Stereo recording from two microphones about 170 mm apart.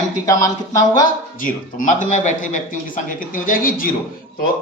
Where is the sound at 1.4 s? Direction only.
50° left (ahead or behind).